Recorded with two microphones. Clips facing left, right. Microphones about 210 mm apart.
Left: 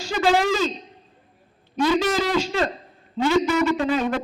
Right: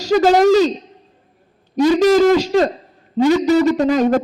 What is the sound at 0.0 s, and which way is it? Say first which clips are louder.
Speech: right 8 dB; 40° right (ahead or behind).